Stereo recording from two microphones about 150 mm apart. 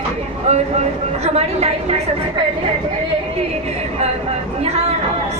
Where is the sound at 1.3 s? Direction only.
45° right (ahead or behind).